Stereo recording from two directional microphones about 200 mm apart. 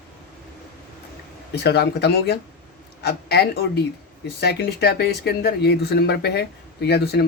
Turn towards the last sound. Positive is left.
turn(degrees=55)  # may be behind; listen again after turning